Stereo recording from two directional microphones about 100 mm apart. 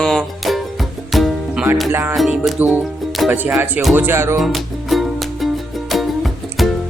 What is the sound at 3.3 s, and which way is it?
Speech, 20° right (ahead or behind).